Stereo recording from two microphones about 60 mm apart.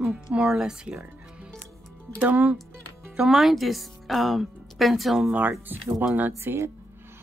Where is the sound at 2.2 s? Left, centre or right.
Right.